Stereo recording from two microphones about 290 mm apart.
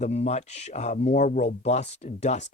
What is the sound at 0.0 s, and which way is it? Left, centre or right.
Speech, left.